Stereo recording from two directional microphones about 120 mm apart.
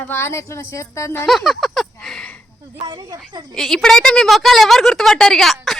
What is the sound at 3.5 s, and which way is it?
A woman's voice, centre (ahead or behind).